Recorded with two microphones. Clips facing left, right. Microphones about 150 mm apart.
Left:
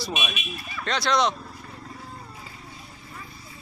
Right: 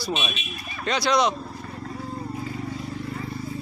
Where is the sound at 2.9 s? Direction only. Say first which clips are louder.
Right 12 dB; 75° right (ahead or behind); by 3.6 s 60° right (ahead or behind).